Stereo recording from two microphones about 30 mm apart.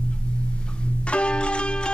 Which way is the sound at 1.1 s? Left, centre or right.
Left.